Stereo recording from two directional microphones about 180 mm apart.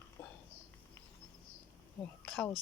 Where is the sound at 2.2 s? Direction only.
5° left (ahead or behind).